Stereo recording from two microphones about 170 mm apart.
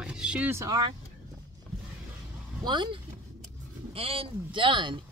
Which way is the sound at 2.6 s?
25° right (ahead or behind).